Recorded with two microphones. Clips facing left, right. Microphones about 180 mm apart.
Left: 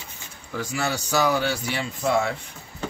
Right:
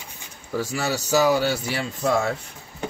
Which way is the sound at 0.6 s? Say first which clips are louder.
Right 2 dB; 5° right (ahead or behind).